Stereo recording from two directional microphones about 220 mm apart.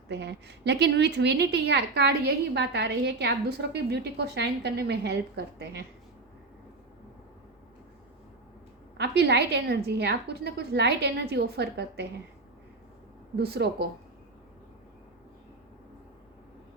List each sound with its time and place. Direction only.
0.1 s a woman's voice: 50° right (ahead or behind)
9.0 s a woman's voice: 50° right (ahead or behind)
13.3 s a woman's voice: 45° right (ahead or behind)